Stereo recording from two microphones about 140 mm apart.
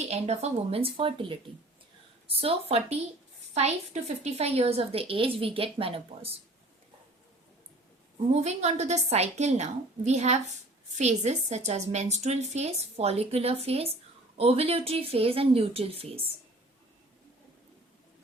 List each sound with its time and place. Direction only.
0.1 s a woman's voice: 50° right (ahead or behind)
4.2 s a woman's voice: 50° right (ahead or behind)
8.3 s a woman's voice: 50° right (ahead or behind)